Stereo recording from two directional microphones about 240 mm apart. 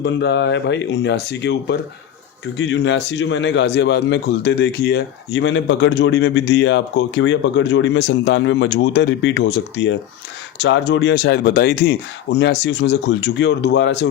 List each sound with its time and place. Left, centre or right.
0.0 s a man's voice: left